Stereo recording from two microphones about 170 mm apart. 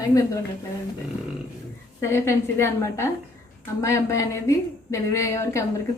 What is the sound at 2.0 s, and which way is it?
A woman's voice, 15° left (ahead or behind).